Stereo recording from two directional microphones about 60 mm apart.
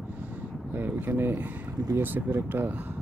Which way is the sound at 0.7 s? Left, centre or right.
Right.